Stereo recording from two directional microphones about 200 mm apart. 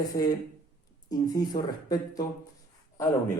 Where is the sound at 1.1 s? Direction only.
20° left (ahead or behind).